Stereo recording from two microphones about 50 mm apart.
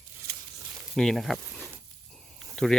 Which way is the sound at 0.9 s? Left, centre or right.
Centre.